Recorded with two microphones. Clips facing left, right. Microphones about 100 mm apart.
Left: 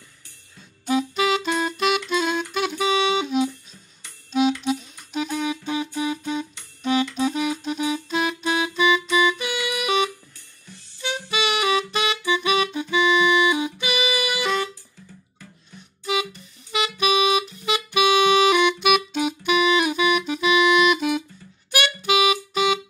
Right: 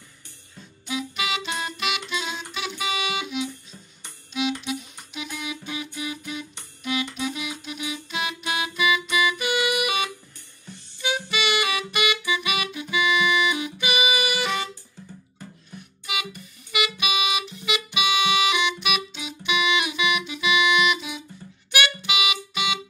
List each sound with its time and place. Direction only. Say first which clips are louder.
0.8 s music: left 8 dB; 40° left (ahead or behind)
2.8 s music: left 7 dB; 30° left (ahead or behind)
4.3 s music: left 6 dB; 40° left (ahead or behind)
9.6 s music: right 3 dB; 20° right (ahead or behind)
11.2 s music: left 5 dB; 20° left (ahead or behind)
13.7 s music: even; 15° right (ahead or behind)
16.7 s music: left 5 dB; 35° left (ahead or behind)